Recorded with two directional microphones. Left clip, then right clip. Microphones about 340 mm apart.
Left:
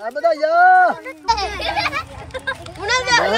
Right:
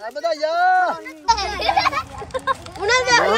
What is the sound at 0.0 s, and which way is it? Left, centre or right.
Speech, left.